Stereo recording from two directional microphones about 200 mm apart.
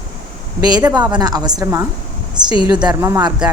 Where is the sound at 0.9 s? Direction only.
20° right (ahead or behind).